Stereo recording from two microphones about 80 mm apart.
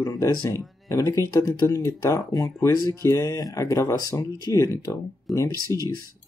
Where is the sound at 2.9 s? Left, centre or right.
Left.